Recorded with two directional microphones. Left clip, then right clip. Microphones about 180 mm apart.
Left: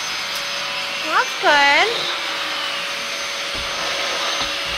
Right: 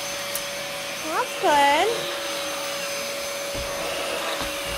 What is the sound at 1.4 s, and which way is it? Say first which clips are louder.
Speech: left 4 dB; 15° right (ahead or behind).